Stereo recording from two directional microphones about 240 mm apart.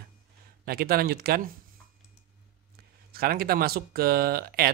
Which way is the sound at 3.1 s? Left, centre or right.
Right.